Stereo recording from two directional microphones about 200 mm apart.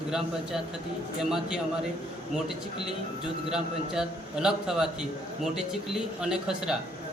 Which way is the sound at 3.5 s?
5° right (ahead or behind).